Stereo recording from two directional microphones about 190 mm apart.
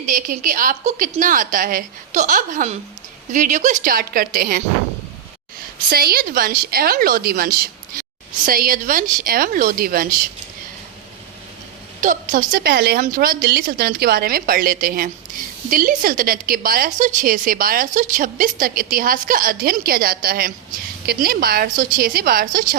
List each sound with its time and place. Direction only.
0.0 s a woman's voice: 45° right (ahead or behind)
5.9 s a woman's voice: 55° right (ahead or behind)
11.9 s a woman's voice: 45° right (ahead or behind)